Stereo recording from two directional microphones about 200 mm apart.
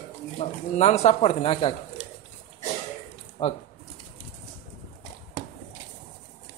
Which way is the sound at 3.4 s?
30° left (ahead or behind).